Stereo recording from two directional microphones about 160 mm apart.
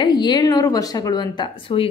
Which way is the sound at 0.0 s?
25° left (ahead or behind).